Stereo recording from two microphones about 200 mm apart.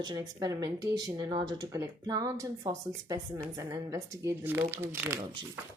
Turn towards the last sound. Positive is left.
turn(degrees=-25)  # may be behind; listen again after turning